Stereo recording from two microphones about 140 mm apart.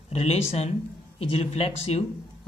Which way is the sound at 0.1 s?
45° left (ahead or behind).